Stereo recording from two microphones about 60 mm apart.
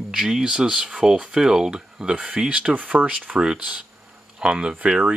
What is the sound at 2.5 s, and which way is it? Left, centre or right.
Speech, right.